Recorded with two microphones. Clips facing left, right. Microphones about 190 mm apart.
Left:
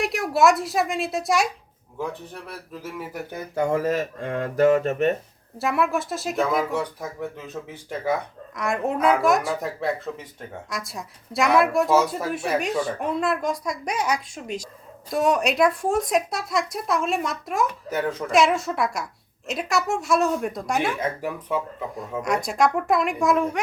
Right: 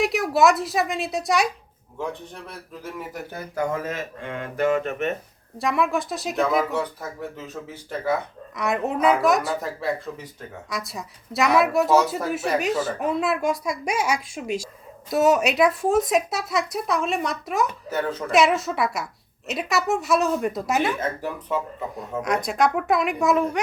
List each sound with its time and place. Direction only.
0.0 s speech: centre (ahead or behind)
3.3 s speech: 25° left (ahead or behind)
5.5 s speech: centre (ahead or behind)
7.0 s speech: 15° left (ahead or behind)
8.5 s speech: centre (ahead or behind)
10.7 s speech: centre (ahead or behind)
21.0 s speech: 10° left (ahead or behind)
21.9 s speech: centre (ahead or behind)